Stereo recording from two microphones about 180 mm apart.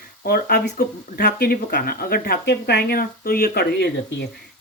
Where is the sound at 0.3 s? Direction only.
55° left (ahead or behind).